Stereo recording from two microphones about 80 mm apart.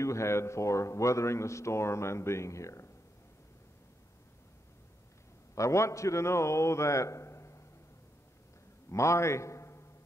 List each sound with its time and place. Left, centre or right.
0.0 s a man's voice: left
5.5 s a man's voice: left
8.9 s a man's voice: left